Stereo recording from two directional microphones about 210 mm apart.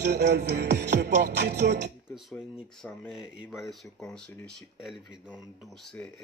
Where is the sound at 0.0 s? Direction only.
55° right (ahead or behind).